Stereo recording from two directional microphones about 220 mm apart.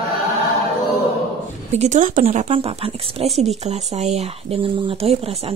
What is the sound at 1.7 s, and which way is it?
Speech, 30° right (ahead or behind).